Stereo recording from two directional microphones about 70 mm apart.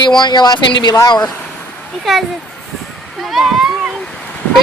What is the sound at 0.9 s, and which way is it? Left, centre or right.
Speech, left.